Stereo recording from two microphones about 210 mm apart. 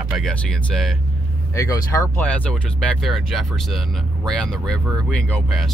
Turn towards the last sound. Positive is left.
turn(degrees=0)  # may be behind; listen again after turning